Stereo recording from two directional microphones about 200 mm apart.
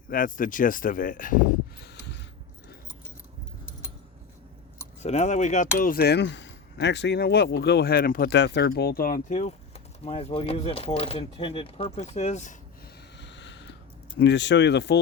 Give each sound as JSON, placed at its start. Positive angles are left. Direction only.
{"t": 0.1, "sound": "speech", "side_deg": 45}
{"t": 5.0, "sound": "speech", "side_deg": 35}
{"t": 5.7, "sound": "speech", "side_deg": 50}
{"t": 13.1, "sound": "a sound", "side_deg": 60}
{"t": 14.2, "sound": "speech", "side_deg": 60}